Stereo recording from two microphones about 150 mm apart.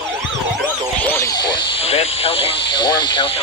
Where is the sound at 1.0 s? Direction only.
15° left (ahead or behind).